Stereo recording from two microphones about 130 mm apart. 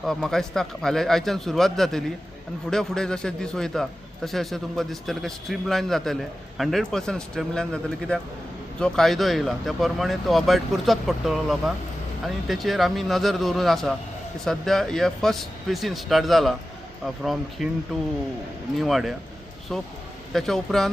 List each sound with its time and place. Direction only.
0.0 s a man's voice: centre (ahead or behind)
17.6 s a man's voice: centre (ahead or behind)
18.8 s a man's voice: centre (ahead or behind)